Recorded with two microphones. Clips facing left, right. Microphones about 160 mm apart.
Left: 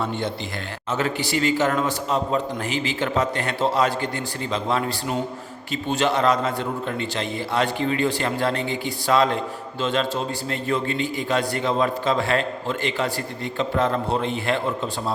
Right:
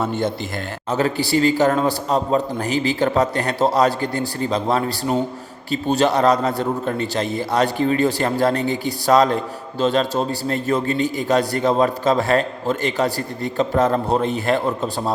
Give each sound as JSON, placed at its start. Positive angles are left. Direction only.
{"t": 0.0, "sound": "a man's voice", "side_deg": -45}